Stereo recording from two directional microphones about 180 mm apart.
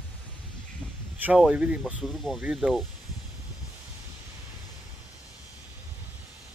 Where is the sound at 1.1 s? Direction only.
5° right (ahead or behind).